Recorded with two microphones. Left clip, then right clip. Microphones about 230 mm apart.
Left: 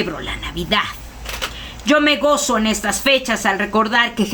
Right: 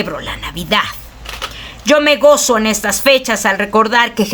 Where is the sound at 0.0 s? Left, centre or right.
Right.